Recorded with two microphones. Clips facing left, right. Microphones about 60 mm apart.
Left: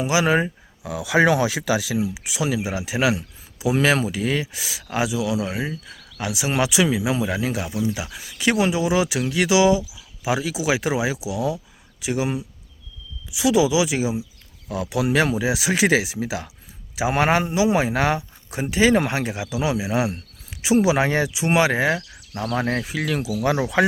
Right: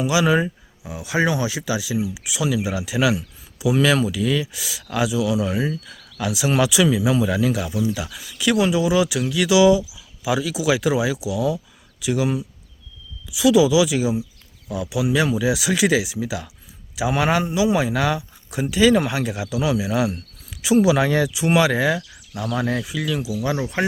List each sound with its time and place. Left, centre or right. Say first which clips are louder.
0.0 s speech: right 1 dB; left
0.8 s speech: left 3 dB; left
2.1 s speech: right 1 dB; left
4.8 s speech: right 2 dB; left
9.9 s a sound: right 1 dB; left
10.7 s speech: right 3 dB; left
14.7 s speech: even; left
15.3 s speech: right 1 dB; left
19.2 s speech: right 1 dB; left
23.4 s speech: left 7 dB; left